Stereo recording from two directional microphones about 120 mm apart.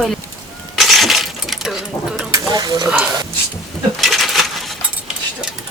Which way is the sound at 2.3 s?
35° right (ahead or behind).